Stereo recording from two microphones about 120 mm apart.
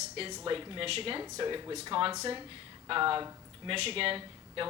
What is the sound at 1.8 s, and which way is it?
Speech, 45° right (ahead or behind).